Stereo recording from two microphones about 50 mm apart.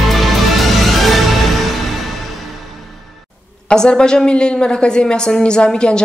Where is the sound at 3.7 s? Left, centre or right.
Centre.